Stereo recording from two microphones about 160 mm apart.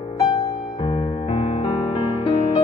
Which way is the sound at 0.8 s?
40° left (ahead or behind).